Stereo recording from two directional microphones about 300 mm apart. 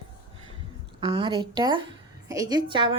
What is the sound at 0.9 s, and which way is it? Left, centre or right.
A woman's voice, centre.